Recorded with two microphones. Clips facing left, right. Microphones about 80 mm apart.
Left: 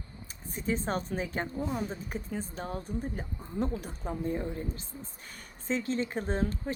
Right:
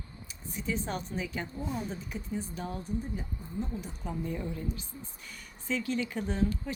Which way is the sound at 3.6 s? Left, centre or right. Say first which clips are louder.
Left 5 dB; left.